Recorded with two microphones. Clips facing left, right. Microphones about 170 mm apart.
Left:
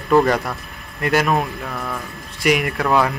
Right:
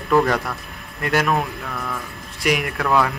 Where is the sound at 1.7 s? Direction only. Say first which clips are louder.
Left 1 dB; 15° left (ahead or behind).